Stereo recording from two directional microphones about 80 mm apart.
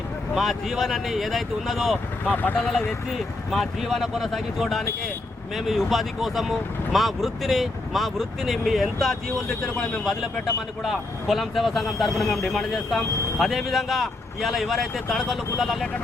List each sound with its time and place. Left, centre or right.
0.3 s speech: centre
2.2 s speech: left
2.6 s speech: centre